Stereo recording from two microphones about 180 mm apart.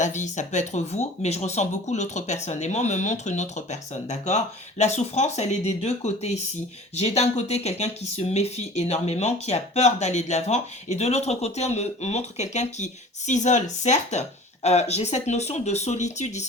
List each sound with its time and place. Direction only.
0.0 s speech: 40° left (ahead or behind)